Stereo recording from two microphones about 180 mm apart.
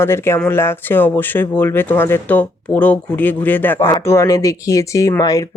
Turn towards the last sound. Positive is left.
turn(degrees=20)  # may be behind; listen again after turning